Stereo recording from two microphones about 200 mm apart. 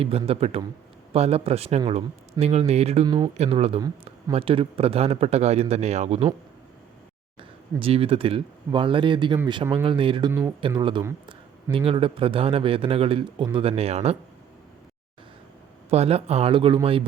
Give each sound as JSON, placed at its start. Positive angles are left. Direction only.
{"t": 0.0, "sound": "a man's voice", "side_deg": -30}
{"t": 7.8, "sound": "a man's voice", "side_deg": -30}
{"t": 15.9, "sound": "a man's voice", "side_deg": -30}